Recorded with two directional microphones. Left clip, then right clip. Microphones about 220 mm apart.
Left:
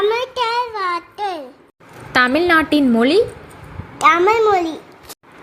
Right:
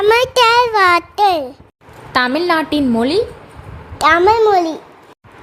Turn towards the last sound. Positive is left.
turn(degrees=-25)  # may be behind; listen again after turning